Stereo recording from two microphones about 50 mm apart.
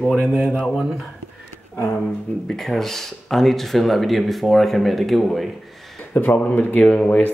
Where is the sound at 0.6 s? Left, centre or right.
Centre.